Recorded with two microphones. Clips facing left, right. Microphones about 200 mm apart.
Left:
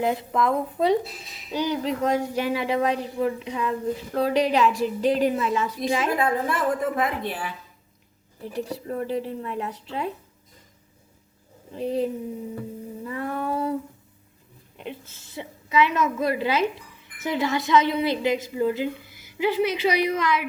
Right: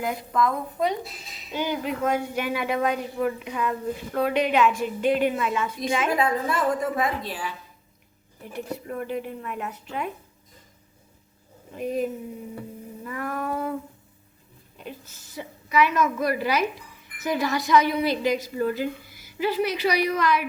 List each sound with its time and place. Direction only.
0.0 s a woman's voice: 25° left (ahead or behind)
6.2 s a woman's voice: 55° left (ahead or behind)
8.5 s a woman's voice: 35° left (ahead or behind)
11.7 s a woman's voice: 30° left (ahead or behind)
15.4 s a woman's voice: 25° left (ahead or behind)